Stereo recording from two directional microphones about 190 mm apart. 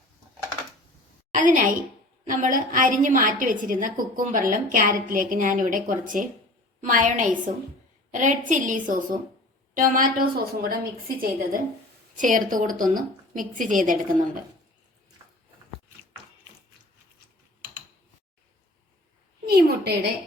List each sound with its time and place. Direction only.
1.3 s a woman's voice: 45° right (ahead or behind)
19.5 s a woman's voice: 55° right (ahead or behind)